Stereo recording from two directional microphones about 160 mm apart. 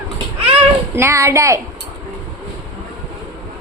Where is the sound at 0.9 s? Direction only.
15° right (ahead or behind).